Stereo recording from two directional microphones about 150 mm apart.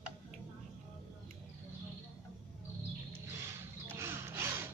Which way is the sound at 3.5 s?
15° right (ahead or behind).